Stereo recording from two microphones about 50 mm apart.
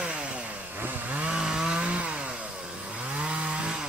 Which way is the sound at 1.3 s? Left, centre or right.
Centre.